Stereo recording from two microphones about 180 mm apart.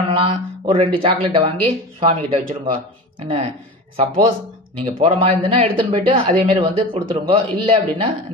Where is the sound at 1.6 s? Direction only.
35° right (ahead or behind).